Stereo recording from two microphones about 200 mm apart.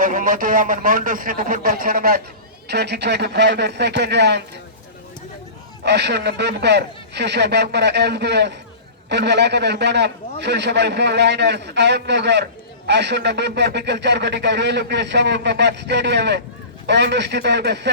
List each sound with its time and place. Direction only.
0.0 s a man's voice: 45° right (ahead or behind); by 4.4 s 60° right (ahead or behind)
5.8 s speech: 55° right (ahead or behind)